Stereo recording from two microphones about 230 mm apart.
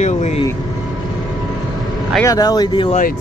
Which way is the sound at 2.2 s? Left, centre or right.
Centre.